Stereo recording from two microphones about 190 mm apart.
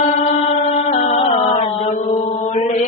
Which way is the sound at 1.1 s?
30° left (ahead or behind).